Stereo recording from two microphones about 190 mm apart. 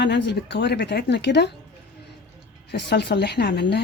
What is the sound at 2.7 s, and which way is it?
Speech, 65° left (ahead or behind).